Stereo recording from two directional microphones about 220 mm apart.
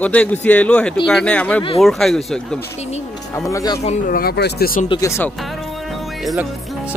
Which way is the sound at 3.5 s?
15° left (ahead or behind).